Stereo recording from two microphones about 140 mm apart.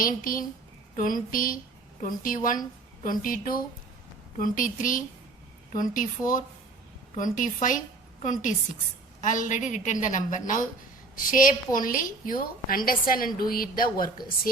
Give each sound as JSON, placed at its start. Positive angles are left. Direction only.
{"t": 0.0, "sound": "a woman's voice", "side_deg": 85}
{"t": 2.0, "sound": "a woman's voice", "side_deg": 75}
{"t": 4.4, "sound": "a woman's voice", "side_deg": 75}